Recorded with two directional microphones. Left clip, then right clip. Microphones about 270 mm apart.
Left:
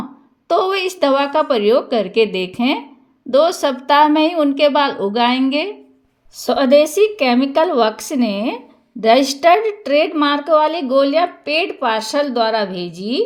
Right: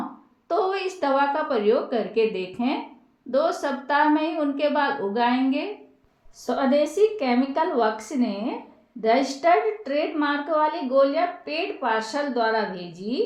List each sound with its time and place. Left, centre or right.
0.4 s a woman's voice: left